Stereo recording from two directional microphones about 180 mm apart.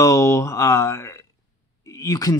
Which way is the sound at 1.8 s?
20° left (ahead or behind).